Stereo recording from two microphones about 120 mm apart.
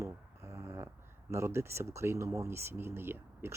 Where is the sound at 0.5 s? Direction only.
25° right (ahead or behind).